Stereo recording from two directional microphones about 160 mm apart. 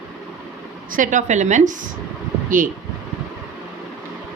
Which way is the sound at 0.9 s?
55° right (ahead or behind).